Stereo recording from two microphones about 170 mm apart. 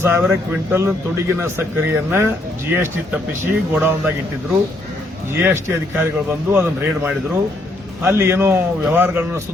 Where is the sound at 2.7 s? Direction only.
15° right (ahead or behind).